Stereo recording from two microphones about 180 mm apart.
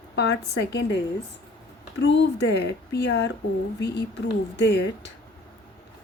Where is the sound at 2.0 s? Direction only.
75° left (ahead or behind).